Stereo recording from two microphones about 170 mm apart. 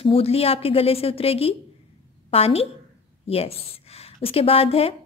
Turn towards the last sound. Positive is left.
turn(degrees=35)  # may be behind; listen again after turning